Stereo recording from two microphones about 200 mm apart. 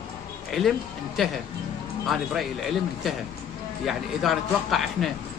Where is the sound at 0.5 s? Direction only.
Centre (ahead or behind).